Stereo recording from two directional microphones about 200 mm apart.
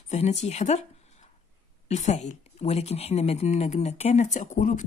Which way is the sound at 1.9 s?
35° left (ahead or behind).